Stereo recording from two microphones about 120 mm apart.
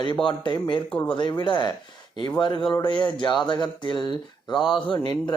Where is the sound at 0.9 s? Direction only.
10° left (ahead or behind).